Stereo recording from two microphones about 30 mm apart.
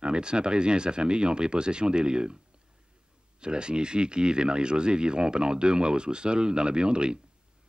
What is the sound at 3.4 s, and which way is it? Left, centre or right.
Speech, right.